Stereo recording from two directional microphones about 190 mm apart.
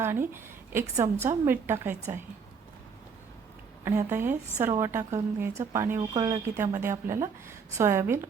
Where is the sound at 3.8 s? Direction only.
15° right (ahead or behind).